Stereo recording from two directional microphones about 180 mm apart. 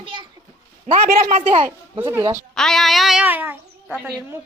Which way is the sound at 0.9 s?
45° right (ahead or behind).